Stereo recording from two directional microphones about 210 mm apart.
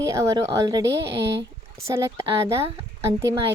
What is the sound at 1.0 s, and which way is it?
Speech, 55° right (ahead or behind).